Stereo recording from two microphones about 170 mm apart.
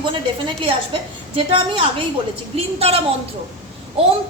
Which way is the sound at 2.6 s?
35° right (ahead or behind).